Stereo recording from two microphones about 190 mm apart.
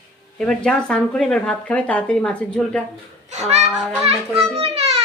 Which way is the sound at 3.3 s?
35° right (ahead or behind).